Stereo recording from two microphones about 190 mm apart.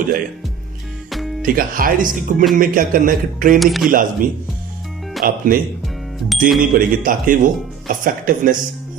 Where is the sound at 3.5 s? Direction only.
Centre (ahead or behind).